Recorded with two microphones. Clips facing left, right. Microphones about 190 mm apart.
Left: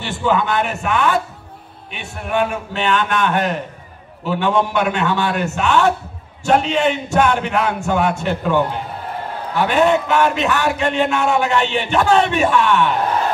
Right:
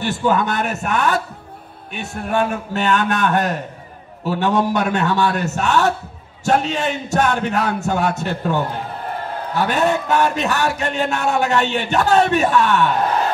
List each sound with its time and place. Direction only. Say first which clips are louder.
0.0 s a man's voice: even; 45° right (ahead or behind)
9.7 s a man's voice: left 4 dB; 40° right (ahead or behind)